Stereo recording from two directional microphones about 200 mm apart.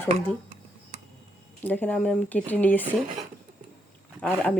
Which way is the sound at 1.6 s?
10° left (ahead or behind).